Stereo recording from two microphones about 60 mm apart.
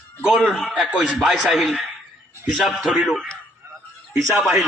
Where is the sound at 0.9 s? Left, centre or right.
Centre.